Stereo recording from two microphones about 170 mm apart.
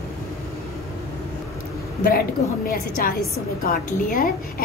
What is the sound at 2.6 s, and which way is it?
A woman's voice, 60° left (ahead or behind).